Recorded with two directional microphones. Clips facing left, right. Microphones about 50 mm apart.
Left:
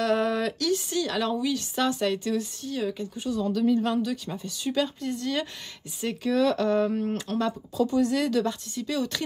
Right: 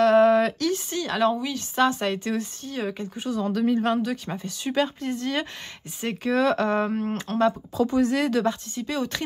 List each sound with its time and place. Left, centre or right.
0.0 s a woman's voice: right